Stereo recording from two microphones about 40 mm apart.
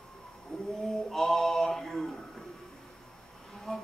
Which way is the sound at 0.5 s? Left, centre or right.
Centre.